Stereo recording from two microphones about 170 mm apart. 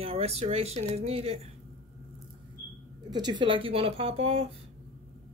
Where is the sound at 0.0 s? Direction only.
35° right (ahead or behind).